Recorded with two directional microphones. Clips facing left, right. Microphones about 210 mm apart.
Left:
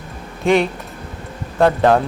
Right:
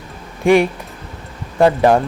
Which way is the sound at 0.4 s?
15° right (ahead or behind).